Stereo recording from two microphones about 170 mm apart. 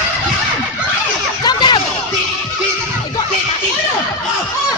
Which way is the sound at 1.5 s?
25° left (ahead or behind).